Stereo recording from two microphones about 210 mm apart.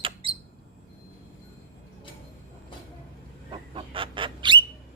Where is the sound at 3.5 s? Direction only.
25° right (ahead or behind).